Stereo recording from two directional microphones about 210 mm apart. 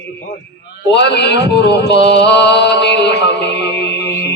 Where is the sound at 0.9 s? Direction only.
55° left (ahead or behind).